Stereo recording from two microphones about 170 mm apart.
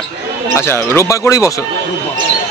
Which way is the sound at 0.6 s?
15° left (ahead or behind).